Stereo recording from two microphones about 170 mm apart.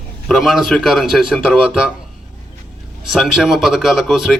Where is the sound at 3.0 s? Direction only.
Centre (ahead or behind).